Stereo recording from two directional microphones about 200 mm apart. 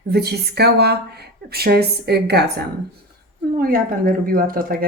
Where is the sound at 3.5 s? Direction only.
45° right (ahead or behind).